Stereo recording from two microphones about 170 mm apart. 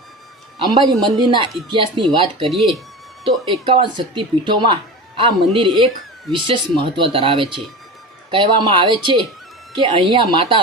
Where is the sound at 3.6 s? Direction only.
30° right (ahead or behind).